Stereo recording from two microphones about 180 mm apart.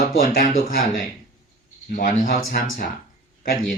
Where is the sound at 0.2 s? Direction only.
55° left (ahead or behind).